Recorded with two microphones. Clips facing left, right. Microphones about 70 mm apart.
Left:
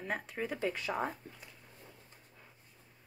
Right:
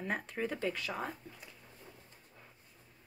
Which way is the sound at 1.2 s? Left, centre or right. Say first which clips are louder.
Even; left.